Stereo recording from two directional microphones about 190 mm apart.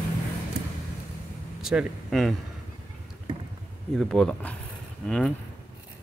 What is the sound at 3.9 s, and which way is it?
Speech, 5° left (ahead or behind).